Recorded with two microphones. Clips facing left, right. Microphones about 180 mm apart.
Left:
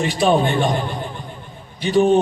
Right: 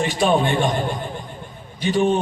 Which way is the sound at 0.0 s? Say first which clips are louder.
Left 1 dB; 45° right (ahead or behind).